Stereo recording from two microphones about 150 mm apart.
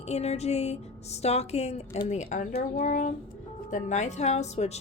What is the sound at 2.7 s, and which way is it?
Speech, 65° left (ahead or behind).